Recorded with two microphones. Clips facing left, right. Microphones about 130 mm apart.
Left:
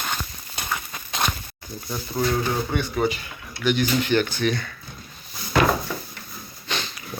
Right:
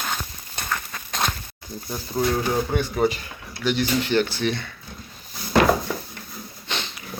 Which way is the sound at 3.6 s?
35° right (ahead or behind).